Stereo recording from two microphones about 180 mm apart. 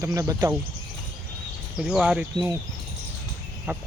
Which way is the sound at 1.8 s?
5° right (ahead or behind).